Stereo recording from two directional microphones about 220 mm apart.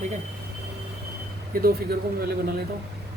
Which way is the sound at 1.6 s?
45° right (ahead or behind).